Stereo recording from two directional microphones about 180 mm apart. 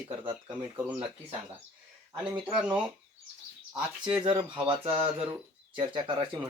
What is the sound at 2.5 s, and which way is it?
Speech, 5° right (ahead or behind).